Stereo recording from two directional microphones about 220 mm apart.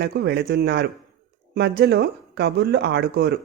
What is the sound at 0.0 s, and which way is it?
Speech, 50° right (ahead or behind).